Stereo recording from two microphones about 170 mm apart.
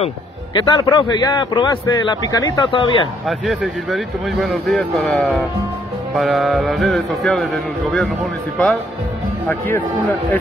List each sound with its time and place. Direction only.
0.6 s a man's voice: 25° left (ahead or behind)
3.3 s speech: centre (ahead or behind)
9.5 s speech: 10° left (ahead or behind)